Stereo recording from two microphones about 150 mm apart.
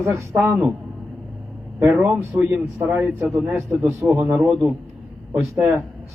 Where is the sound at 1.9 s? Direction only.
10° right (ahead or behind).